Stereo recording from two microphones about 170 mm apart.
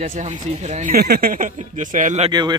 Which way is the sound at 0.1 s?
45° right (ahead or behind).